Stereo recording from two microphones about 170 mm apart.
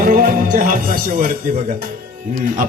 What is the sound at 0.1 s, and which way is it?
Music, 55° right (ahead or behind).